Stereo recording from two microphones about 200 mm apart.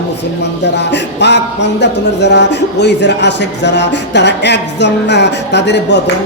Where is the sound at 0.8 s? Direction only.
60° left (ahead or behind).